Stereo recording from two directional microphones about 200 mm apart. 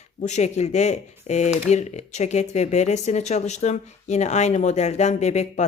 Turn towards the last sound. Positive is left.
turn(degrees=35)  # may be behind; listen again after turning